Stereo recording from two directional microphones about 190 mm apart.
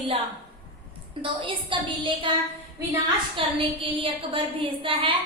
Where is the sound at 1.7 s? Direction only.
25° right (ahead or behind).